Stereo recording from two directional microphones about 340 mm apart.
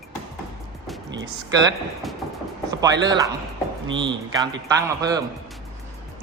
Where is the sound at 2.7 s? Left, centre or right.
Centre.